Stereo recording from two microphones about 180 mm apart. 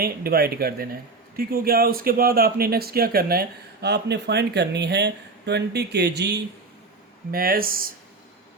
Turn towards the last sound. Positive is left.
turn(degrees=-55)  # may be behind; listen again after turning